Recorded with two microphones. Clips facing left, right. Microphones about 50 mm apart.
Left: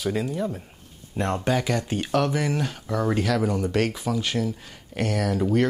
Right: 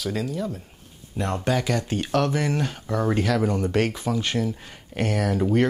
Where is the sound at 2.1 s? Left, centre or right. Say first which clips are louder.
Even; centre.